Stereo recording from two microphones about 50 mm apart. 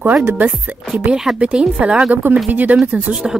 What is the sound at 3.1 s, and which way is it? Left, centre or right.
Speech, centre.